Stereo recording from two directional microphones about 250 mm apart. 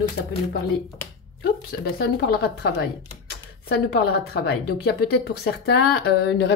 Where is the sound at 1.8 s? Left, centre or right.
Left.